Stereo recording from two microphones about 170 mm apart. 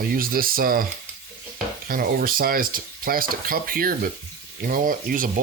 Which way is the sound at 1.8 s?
55° right (ahead or behind).